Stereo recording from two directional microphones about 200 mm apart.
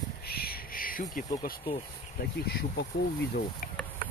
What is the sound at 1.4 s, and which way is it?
Speech, 45° left (ahead or behind).